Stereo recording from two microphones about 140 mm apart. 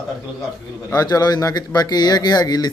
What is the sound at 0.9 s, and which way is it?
Speech, 25° left (ahead or behind).